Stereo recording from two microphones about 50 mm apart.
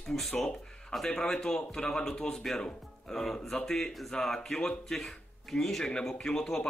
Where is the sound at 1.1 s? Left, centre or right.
Centre.